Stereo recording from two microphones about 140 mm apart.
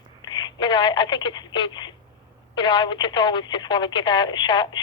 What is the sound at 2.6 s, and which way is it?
Speech, 35° left (ahead or behind).